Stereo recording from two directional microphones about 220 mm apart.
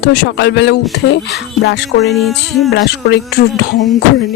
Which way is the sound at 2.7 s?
50° left (ahead or behind).